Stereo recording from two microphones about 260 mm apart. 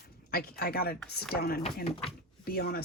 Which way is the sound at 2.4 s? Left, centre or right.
Left.